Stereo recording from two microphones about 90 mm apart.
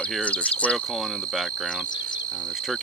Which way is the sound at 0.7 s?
Centre (ahead or behind).